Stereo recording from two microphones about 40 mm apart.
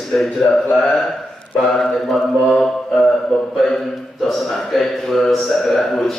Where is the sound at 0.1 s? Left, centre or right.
Left.